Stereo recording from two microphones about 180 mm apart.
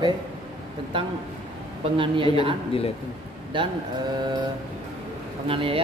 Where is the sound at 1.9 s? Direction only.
30° right (ahead or behind).